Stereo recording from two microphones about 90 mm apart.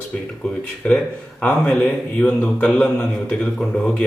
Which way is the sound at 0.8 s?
10° left (ahead or behind).